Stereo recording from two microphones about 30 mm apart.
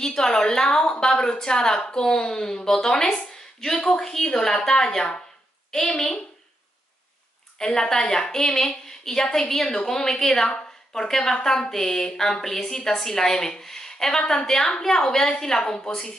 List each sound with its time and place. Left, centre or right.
0.0 s a woman's voice: left
4.6 s a woman's voice: left
7.5 s a woman's voice: centre
8.0 s a woman's voice: left
8.5 s a woman's voice: centre